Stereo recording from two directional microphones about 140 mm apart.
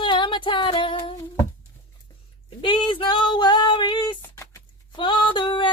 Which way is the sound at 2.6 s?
35° left (ahead or behind).